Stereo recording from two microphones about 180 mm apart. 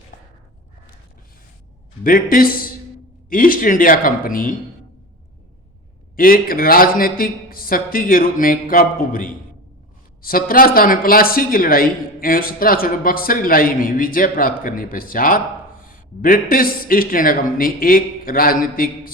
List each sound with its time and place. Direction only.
2.0 s speech: 50° left (ahead or behind)
6.1 s speech: 55° left (ahead or behind)